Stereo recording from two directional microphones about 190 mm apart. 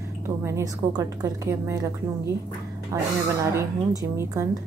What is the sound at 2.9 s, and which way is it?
Speech, 15° right (ahead or behind).